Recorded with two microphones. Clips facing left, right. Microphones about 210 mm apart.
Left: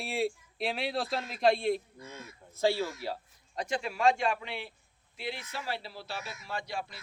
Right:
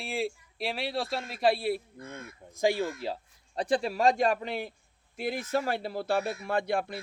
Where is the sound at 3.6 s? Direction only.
35° right (ahead or behind).